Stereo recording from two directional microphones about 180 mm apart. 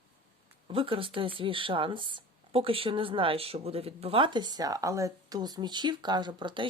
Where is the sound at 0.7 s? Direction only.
30° right (ahead or behind).